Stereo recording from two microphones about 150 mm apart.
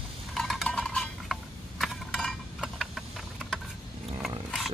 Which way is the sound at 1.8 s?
Centre (ahead or behind).